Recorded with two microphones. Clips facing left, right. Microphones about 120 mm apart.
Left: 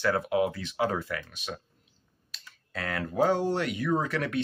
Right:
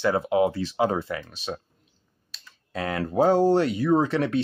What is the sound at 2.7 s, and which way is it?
Speech, 25° right (ahead or behind).